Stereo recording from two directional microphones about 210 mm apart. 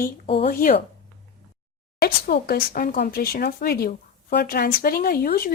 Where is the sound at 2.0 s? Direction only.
45° left (ahead or behind).